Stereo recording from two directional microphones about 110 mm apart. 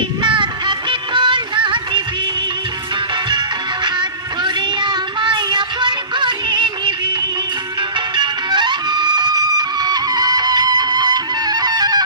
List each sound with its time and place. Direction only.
0.2 s music: 45° right (ahead or behind)
4.4 s music: 45° right (ahead or behind)